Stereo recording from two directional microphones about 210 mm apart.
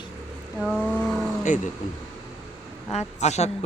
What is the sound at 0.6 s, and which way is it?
Vehicle, centre (ahead or behind).